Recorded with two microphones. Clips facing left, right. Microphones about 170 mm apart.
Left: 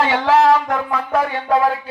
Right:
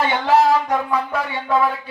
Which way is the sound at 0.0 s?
90° left.